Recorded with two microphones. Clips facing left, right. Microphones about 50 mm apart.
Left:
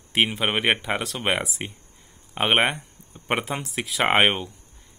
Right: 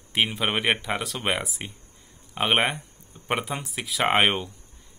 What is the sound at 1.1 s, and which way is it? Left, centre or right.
Speech, centre.